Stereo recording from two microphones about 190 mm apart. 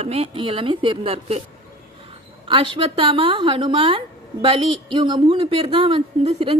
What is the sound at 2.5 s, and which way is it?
A woman's voice, 25° right (ahead or behind).